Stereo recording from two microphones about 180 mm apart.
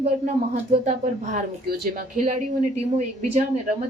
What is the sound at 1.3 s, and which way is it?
A woman's voice, 50° right (ahead or behind).